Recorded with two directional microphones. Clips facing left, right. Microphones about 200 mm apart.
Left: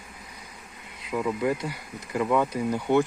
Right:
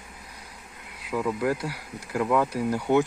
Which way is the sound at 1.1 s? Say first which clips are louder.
Even; centre (ahead or behind).